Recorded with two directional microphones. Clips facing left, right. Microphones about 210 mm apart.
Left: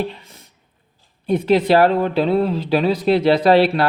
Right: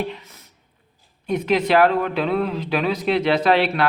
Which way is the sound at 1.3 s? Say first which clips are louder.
Left 4 dB; 30° left (ahead or behind).